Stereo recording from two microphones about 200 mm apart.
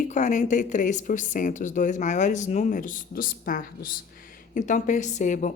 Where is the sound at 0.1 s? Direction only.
40° left (ahead or behind).